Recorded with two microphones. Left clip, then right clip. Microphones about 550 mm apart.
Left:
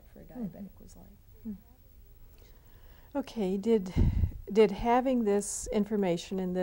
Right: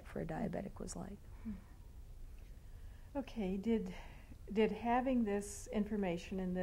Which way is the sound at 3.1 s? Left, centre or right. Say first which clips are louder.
Left 9 dB; left.